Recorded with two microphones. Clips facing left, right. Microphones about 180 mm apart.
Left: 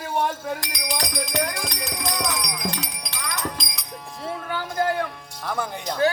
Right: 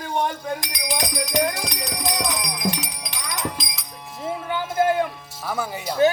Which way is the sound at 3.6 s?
Centre (ahead or behind).